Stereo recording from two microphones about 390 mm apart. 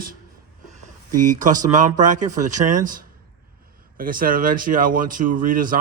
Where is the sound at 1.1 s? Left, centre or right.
Right.